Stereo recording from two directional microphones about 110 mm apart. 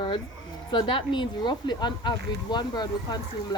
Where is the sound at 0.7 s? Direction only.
50° left (ahead or behind).